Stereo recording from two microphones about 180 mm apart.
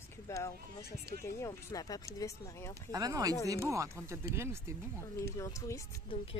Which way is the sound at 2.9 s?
20° right (ahead or behind).